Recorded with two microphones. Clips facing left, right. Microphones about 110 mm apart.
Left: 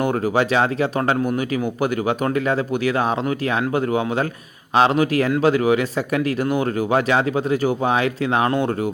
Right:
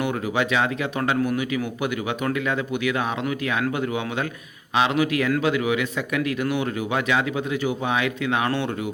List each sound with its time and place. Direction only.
0.0 s speech: 40° left (ahead or behind)